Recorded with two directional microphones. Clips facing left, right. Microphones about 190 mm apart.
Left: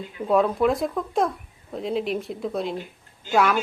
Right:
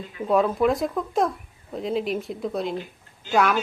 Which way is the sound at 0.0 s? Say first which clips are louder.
Even; centre (ahead or behind).